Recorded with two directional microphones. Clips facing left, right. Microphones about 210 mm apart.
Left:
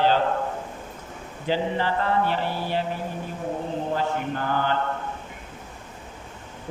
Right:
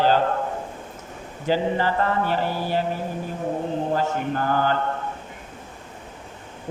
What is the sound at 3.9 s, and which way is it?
Mantra, 45° right (ahead or behind).